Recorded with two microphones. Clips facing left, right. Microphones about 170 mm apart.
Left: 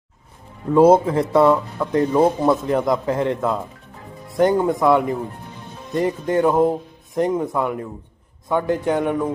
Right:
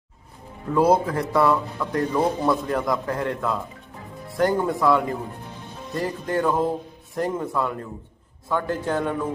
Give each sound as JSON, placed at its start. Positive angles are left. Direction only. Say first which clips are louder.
{"t": 0.7, "sound": "a man's voice", "louder": "left 6 dB", "side_deg": 25}